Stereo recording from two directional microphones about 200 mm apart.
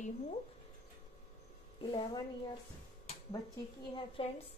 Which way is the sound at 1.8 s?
25° left (ahead or behind).